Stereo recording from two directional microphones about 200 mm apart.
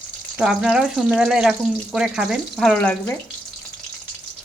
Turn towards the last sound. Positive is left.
turn(degrees=5)  # may be behind; listen again after turning